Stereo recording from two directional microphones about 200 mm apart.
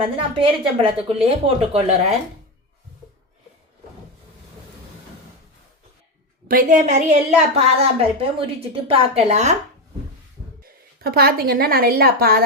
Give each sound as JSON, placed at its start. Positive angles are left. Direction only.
{"t": 0.2, "sound": "a woman's voice", "side_deg": -25}
{"t": 6.5, "sound": "a woman's voice", "side_deg": -40}
{"t": 10.6, "sound": "a woman's voice", "side_deg": -50}